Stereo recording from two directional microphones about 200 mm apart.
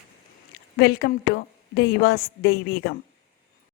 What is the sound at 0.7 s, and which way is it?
Speech, 55° left (ahead or behind).